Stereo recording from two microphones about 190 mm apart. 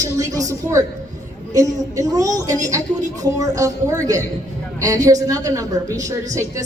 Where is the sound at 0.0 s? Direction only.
20° right (ahead or behind).